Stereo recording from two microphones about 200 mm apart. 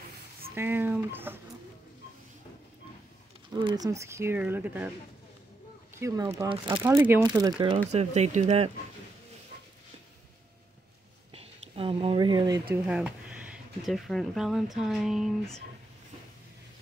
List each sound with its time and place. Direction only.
0.6 s a sound: 10° right (ahead or behind)
3.5 s speech: 20° right (ahead or behind)
5.9 s speech: 15° right (ahead or behind)
7.9 s speech: 35° right (ahead or behind)
11.3 s a sound: 30° right (ahead or behind)
12.8 s speech: 5° right (ahead or behind)